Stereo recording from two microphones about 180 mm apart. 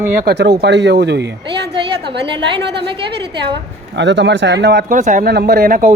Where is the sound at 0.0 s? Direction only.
45° right (ahead or behind).